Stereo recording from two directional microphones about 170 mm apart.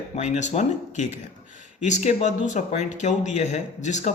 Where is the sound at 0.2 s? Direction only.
45° left (ahead or behind).